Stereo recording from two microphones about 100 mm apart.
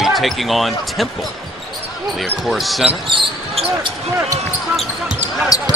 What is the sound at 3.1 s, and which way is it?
Basketball bounce, 55° right (ahead or behind).